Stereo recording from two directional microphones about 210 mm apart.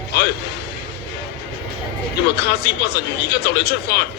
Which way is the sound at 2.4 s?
50° left (ahead or behind).